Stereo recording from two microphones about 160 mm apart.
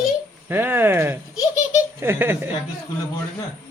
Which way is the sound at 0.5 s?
15° right (ahead or behind).